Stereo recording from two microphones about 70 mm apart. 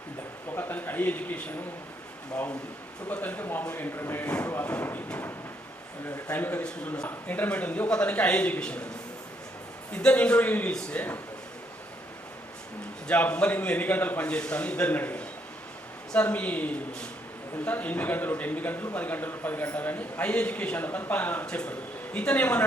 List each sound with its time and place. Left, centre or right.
0.5 s speech: left
3.1 s speech: left
6.3 s speech: left
6.9 s a man's voice: centre
9.9 s speech: centre
10.7 s a man's voice: centre
13.1 s a man's voice: centre